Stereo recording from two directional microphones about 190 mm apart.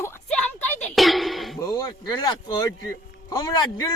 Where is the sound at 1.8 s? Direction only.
20° left (ahead or behind).